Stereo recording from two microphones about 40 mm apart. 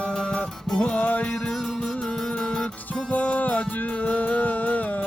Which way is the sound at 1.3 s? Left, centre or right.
Centre.